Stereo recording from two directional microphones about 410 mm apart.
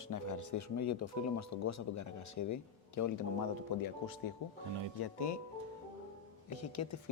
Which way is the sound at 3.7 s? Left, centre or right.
Left.